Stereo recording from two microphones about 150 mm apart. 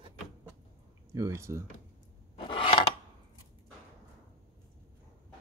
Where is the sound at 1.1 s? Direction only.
20° right (ahead or behind).